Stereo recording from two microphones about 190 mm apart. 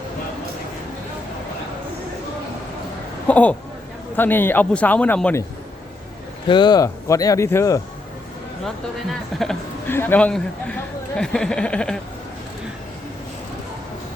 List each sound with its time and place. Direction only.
3.2 s a man's voice: 5° left (ahead or behind)
6.5 s a man's voice: 25° left (ahead or behind)
9.4 s a man's voice: 5° left (ahead or behind)